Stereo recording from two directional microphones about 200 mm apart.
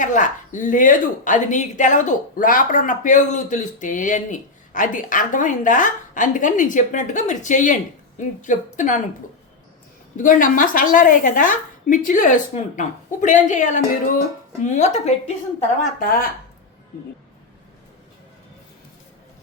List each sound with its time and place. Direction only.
0.0 s a woman's voice: 40° left (ahead or behind)
10.2 s a woman's voice: 40° left (ahead or behind)